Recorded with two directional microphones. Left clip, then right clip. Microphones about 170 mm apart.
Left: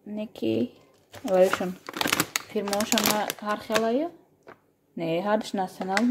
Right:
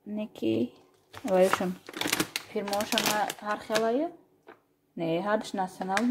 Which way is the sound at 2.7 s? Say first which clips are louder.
Left 2 dB; 35° left (ahead or behind).